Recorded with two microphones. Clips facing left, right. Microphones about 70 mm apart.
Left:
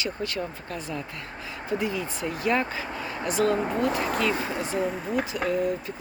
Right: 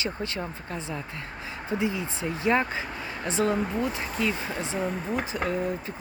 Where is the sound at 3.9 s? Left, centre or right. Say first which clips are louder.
Left 7 dB; left.